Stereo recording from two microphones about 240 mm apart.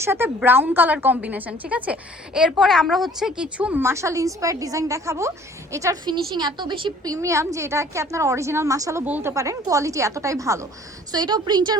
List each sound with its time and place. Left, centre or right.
0.0 s a woman's voice: centre